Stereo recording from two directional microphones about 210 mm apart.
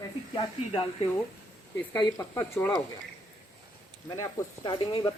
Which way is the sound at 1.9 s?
15° left (ahead or behind).